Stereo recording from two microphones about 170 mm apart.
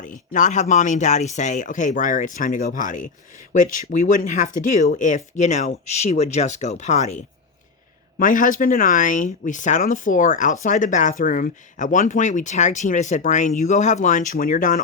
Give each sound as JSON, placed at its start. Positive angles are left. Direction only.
{"t": 0.0, "sound": "speech", "side_deg": 50}
{"t": 8.2, "sound": "speech", "side_deg": 50}